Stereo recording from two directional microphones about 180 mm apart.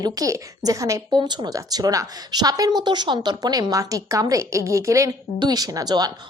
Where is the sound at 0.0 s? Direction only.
20° right (ahead or behind).